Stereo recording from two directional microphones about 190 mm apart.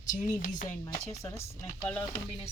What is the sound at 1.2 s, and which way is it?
Speech, 15° left (ahead or behind).